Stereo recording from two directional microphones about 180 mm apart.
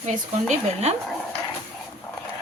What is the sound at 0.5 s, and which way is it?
Speech, 35° right (ahead or behind).